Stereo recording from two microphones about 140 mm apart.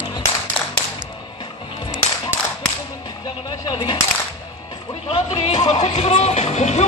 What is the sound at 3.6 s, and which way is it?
Speech, 30° left (ahead or behind).